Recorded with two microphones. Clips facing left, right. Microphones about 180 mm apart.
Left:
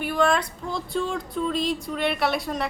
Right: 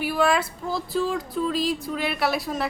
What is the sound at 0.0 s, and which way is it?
A woman's voice, 5° right (ahead or behind).